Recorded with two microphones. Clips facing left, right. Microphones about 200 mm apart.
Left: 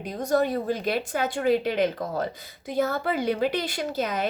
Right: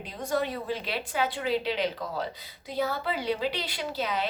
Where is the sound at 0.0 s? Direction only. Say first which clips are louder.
Left 6 dB; 45° left (ahead or behind).